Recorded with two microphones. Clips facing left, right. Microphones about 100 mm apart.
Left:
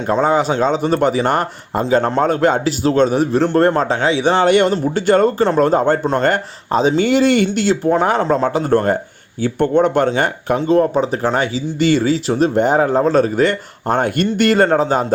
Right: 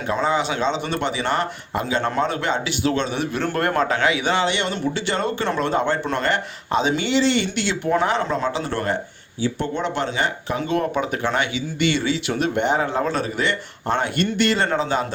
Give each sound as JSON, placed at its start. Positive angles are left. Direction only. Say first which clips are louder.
{"t": 0.1, "sound": "a man's voice", "louder": "left 6 dB", "side_deg": 45}
{"t": 10.6, "sound": "a man's voice", "louder": "left 8 dB", "side_deg": 35}